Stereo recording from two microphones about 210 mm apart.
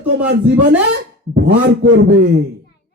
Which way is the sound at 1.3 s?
60° right (ahead or behind).